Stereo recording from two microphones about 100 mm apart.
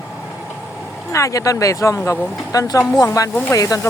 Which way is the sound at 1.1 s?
30° left (ahead or behind).